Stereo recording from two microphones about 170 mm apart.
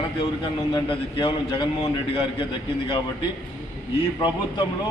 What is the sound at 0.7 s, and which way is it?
A man's voice, 30° left (ahead or behind).